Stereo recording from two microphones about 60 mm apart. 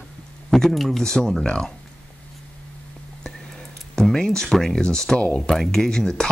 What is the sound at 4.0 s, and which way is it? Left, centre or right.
Speech, centre.